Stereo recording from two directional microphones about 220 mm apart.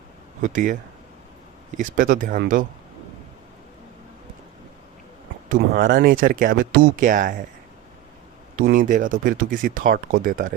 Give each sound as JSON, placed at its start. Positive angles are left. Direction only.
{"t": 0.4, "sound": "speech", "side_deg": -35}
{"t": 5.5, "sound": "speech", "side_deg": -40}
{"t": 8.6, "sound": "speech", "side_deg": -40}